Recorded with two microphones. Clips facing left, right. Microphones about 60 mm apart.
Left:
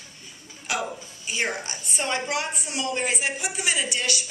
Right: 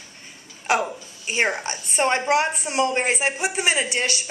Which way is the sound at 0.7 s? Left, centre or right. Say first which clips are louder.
Right 7 dB; right.